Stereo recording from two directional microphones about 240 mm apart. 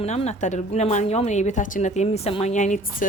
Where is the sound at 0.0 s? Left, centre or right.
Left.